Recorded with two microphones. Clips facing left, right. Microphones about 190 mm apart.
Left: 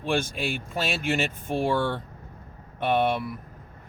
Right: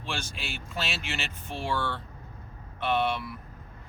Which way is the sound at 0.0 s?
50° left (ahead or behind).